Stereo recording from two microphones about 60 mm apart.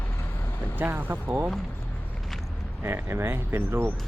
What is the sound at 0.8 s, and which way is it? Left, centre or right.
Speech, right.